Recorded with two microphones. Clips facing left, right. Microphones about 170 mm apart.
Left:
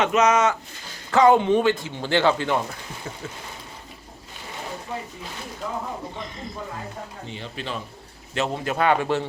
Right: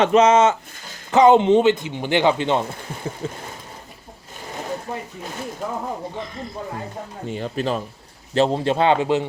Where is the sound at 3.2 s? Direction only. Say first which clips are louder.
Right 9 dB; 30° right (ahead or behind).